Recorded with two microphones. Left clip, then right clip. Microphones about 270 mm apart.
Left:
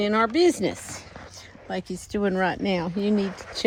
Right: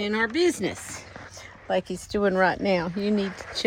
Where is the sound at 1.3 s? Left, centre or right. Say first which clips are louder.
Right 7 dB; centre.